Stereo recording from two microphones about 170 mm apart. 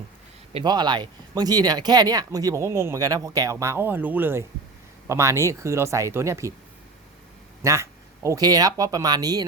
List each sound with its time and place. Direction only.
0.5 s speech: 25° right (ahead or behind)
7.6 s speech: 15° right (ahead or behind)